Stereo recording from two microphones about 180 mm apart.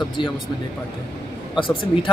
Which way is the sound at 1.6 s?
25° left (ahead or behind).